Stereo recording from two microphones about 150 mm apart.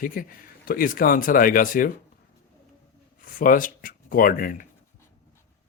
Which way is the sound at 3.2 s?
65° left (ahead or behind).